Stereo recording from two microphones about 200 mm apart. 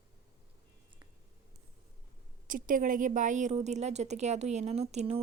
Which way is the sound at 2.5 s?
40° right (ahead or behind).